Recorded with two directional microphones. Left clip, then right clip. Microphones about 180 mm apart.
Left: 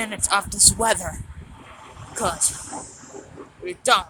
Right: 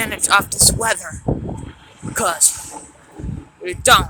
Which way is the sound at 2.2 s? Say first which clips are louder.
Right 6 dB; 10° right (ahead or behind).